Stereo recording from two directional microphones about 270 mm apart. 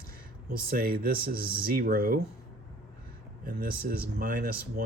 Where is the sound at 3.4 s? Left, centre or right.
Right.